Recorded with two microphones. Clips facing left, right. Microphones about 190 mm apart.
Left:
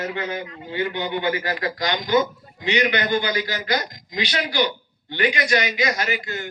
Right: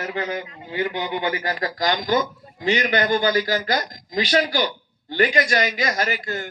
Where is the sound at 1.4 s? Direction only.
35° right (ahead or behind).